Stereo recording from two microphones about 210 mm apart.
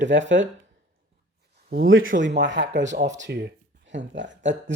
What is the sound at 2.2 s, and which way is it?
Speech, 55° right (ahead or behind).